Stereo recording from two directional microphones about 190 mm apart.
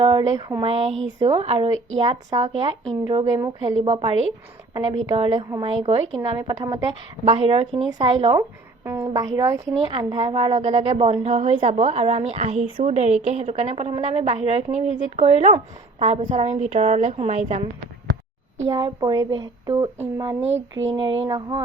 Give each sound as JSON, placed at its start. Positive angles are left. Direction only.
{"t": 0.0, "sound": "speech", "side_deg": -25}
{"t": 0.6, "sound": "a woman's voice", "side_deg": -30}
{"t": 4.7, "sound": "speech", "side_deg": -20}
{"t": 6.1, "sound": "speech", "side_deg": -20}
{"t": 7.3, "sound": "speech", "side_deg": -30}
{"t": 8.4, "sound": "a woman's voice", "side_deg": -15}
{"t": 18.7, "sound": "speech", "side_deg": -20}
{"t": 20.5, "sound": "speech", "side_deg": -80}
{"t": 20.9, "sound": "speech", "side_deg": -25}